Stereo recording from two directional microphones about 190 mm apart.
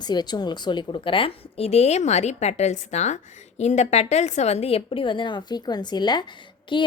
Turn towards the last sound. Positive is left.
turn(degrees=25)  # may be behind; listen again after turning